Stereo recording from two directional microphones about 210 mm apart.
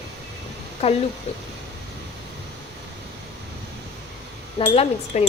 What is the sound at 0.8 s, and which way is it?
Speech, 30° left (ahead or behind).